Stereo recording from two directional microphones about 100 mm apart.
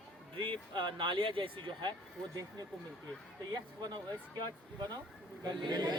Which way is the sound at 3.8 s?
40° right (ahead or behind).